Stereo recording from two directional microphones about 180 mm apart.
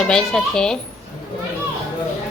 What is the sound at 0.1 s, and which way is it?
Speech, 5° left (ahead or behind).